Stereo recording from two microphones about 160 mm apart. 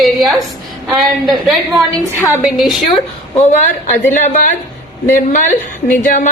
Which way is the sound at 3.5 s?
50° left (ahead or behind).